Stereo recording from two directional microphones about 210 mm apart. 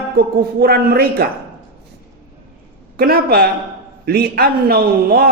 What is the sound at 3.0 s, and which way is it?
A man's voice, 45° right (ahead or behind).